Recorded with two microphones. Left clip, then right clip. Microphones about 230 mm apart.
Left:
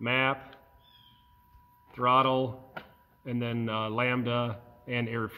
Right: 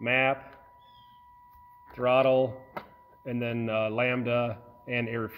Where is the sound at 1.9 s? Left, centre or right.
Centre.